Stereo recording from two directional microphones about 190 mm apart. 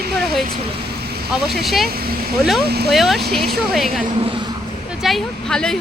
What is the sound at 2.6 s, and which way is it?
Speech, 60° right (ahead or behind).